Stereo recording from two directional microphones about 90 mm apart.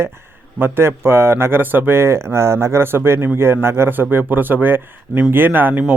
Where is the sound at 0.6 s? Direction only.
25° right (ahead or behind).